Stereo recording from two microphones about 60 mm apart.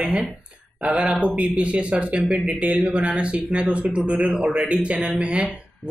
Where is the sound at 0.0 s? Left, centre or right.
Right.